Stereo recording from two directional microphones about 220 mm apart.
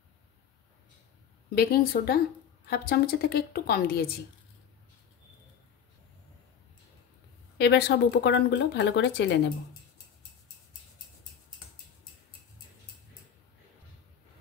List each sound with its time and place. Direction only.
1.5 s speech: 45° left (ahead or behind)
7.5 s speech: 50° left (ahead or behind)